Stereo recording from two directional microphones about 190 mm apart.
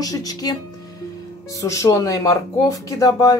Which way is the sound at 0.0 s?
20° left (ahead or behind).